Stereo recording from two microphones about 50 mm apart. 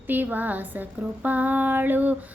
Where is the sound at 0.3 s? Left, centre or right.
Right.